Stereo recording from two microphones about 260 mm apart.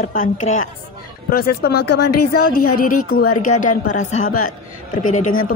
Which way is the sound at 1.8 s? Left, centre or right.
Left.